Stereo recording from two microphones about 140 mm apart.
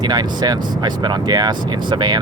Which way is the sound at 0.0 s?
30° right (ahead or behind).